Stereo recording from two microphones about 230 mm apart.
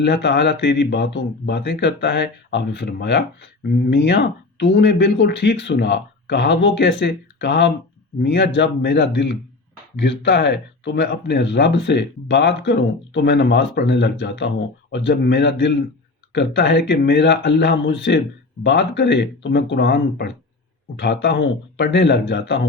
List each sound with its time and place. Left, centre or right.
0.0 s speech: left